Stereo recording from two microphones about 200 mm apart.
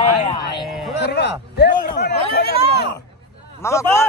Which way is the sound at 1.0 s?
55° left (ahead or behind).